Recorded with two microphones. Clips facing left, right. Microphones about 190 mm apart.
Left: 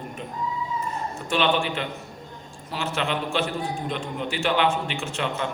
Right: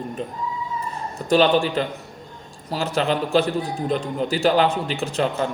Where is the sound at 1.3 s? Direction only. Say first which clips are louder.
Right 6 dB; 35° right (ahead or behind).